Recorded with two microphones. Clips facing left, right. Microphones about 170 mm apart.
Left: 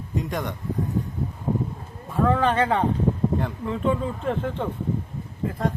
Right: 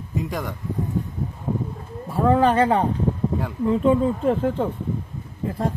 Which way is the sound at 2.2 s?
30° right (ahead or behind).